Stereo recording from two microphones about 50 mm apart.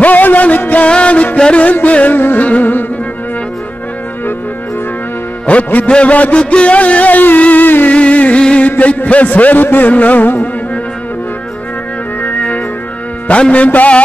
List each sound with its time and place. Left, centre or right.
0.0 s music: left
0.8 s music: left
2.1 s music: left
5.5 s a man's voice: left
5.9 s music: left
7.9 s a sound: left
8.6 s a man's voice: left
12.4 s music: left